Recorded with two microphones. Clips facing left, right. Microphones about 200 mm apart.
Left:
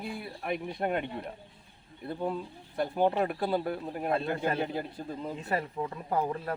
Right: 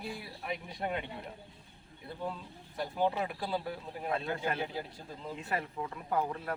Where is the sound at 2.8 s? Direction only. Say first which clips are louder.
Left 5 dB; 55° left (ahead or behind).